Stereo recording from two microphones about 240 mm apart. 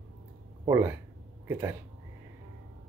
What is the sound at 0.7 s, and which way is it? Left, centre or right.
Speech, centre.